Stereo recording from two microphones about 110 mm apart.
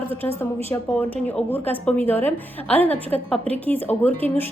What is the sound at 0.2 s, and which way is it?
A woman's voice, 20° left (ahead or behind).